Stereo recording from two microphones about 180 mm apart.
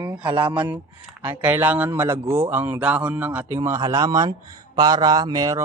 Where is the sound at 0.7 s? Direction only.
10° right (ahead or behind).